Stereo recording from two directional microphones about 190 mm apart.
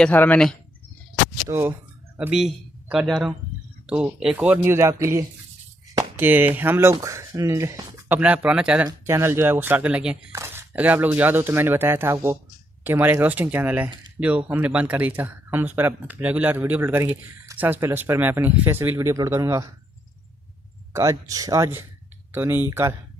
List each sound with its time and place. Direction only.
0.0 s speech: 10° left (ahead or behind)
1.5 s speech: 10° right (ahead or behind)
20.9 s speech: 15° right (ahead or behind)